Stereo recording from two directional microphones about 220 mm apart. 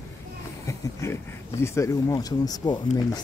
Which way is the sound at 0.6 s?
15° left (ahead or behind).